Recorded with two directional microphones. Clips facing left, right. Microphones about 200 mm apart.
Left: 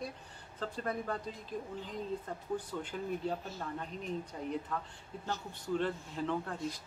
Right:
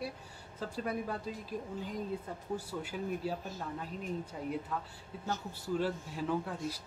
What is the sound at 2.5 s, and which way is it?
Speech, 5° right (ahead or behind).